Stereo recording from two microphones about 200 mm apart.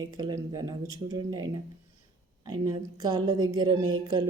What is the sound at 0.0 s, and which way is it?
Speech, 20° right (ahead or behind).